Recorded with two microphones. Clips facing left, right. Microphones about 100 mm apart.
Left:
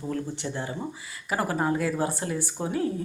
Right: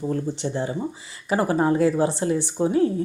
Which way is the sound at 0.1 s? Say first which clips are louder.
Right 2 dB; 25° right (ahead or behind).